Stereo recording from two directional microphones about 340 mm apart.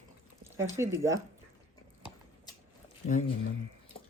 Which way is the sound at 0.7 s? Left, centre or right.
Centre.